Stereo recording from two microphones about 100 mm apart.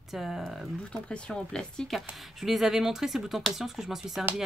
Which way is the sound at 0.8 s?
10° left (ahead or behind).